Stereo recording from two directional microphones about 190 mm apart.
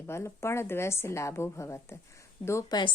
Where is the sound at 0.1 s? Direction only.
15° left (ahead or behind).